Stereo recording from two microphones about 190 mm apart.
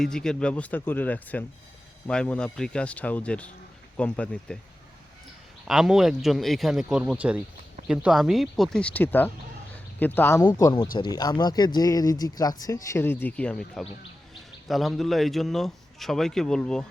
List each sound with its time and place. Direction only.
0.0 s speech: 5° left (ahead or behind)
5.6 s speech: centre (ahead or behind)